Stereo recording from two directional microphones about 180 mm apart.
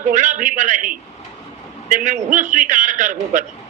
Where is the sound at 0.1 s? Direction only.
45° right (ahead or behind).